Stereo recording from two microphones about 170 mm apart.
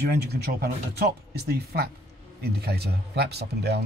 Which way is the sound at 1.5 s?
65° right (ahead or behind).